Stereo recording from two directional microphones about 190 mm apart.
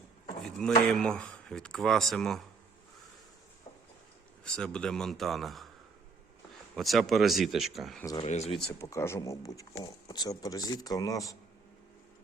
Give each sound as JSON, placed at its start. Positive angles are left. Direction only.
{"t": 0.4, "sound": "speech", "side_deg": 5}
{"t": 4.5, "sound": "speech", "side_deg": 5}
{"t": 6.7, "sound": "speech", "side_deg": 0}
{"t": 8.2, "sound": "speech", "side_deg": 35}
{"t": 8.8, "sound": "speech", "side_deg": 15}